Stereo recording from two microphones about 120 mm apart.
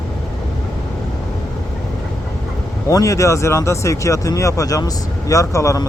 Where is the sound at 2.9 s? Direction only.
25° left (ahead or behind).